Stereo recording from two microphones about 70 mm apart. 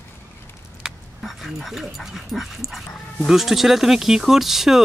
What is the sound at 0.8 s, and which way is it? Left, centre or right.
Speech, centre.